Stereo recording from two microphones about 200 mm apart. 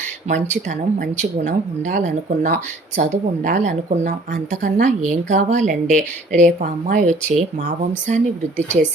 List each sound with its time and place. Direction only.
0.5 s speech: 35° right (ahead or behind)